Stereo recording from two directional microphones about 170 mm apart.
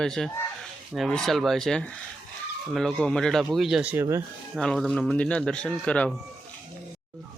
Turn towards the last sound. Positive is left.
turn(degrees=5)  # may be behind; listen again after turning